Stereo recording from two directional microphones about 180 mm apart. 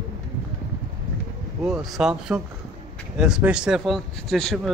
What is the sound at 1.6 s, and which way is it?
Speech, centre (ahead or behind).